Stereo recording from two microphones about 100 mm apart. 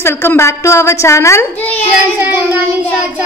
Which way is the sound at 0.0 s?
25° left (ahead or behind).